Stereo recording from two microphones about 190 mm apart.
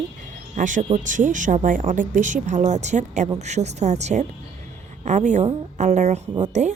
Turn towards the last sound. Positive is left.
turn(degrees=-35)  # may be behind; listen again after turning